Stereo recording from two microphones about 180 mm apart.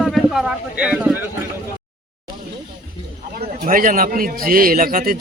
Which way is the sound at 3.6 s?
50° right (ahead or behind).